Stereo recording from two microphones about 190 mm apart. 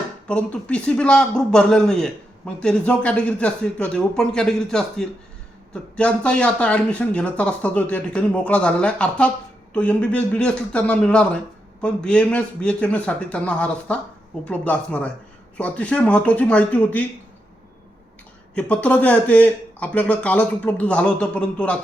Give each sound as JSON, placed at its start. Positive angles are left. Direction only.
{"t": 0.3, "sound": "speech", "side_deg": 5}
{"t": 18.5, "sound": "speech", "side_deg": 5}